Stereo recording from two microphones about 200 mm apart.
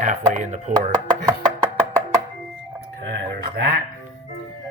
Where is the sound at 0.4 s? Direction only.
35° right (ahead or behind).